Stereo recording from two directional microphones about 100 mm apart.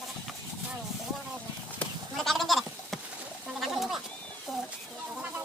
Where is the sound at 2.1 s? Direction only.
Centre (ahead or behind).